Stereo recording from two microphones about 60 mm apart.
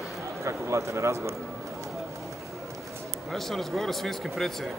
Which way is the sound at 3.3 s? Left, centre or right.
Centre.